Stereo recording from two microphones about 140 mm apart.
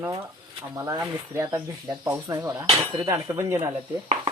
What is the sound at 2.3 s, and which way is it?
Speech, 25° right (ahead or behind).